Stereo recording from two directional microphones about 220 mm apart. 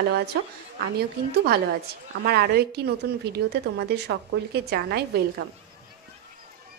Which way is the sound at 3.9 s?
50° right (ahead or behind).